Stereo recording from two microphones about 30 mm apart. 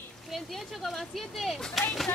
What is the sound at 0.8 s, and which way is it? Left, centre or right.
Speech, centre.